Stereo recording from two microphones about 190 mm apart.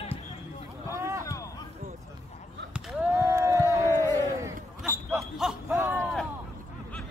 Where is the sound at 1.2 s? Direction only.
15° left (ahead or behind).